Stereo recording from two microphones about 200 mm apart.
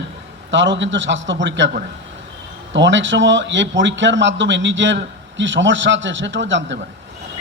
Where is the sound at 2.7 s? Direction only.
65° right (ahead or behind).